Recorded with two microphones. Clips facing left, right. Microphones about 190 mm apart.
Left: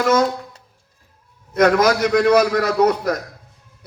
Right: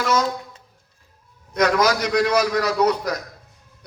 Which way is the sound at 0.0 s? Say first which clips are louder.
Left 5 dB; 50° left (ahead or behind).